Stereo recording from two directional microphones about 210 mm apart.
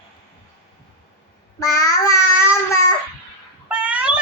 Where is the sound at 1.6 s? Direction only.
15° left (ahead or behind).